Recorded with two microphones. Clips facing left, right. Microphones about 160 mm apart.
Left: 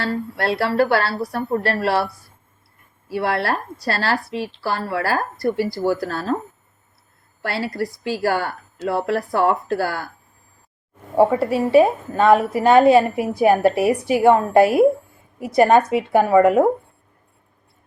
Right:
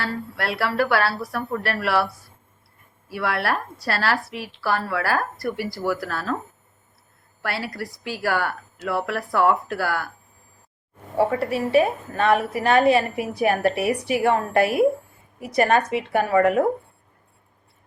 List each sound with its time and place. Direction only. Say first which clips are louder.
0.0 s a woman's voice: left 5 dB; 25° left (ahead or behind)
3.2 s a woman's voice: left 3 dB; 30° left (ahead or behind)
6.0 s speech: left 4 dB; 30° left (ahead or behind)
7.4 s a woman's voice: left 5 dB; 25° left (ahead or behind)
11.2 s a woman's voice: left 5 dB; 25° left (ahead or behind)